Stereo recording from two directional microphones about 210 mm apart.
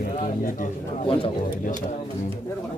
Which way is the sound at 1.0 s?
25° left (ahead or behind).